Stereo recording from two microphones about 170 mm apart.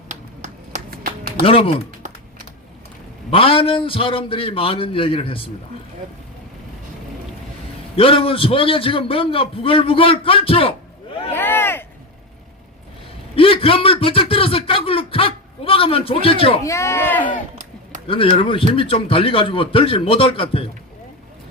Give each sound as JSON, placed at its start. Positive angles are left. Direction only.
{"t": 0.1, "sound": "a sound", "side_deg": -45}
{"t": 0.9, "sound": "music", "side_deg": -60}
{"t": 1.5, "sound": "a man's voice", "side_deg": 35}
{"t": 3.2, "sound": "a man's voice", "side_deg": 35}
{"t": 7.9, "sound": "a man's voice", "side_deg": 35}
{"t": 11.3, "sound": "vehicle", "side_deg": 15}
{"t": 13.3, "sound": "speech", "side_deg": 35}
{"t": 16.6, "sound": "speech", "side_deg": 15}
{"t": 18.1, "sound": "a man's voice", "side_deg": 30}